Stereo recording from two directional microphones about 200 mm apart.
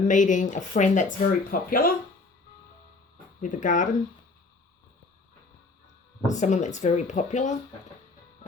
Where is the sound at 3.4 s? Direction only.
40° left (ahead or behind).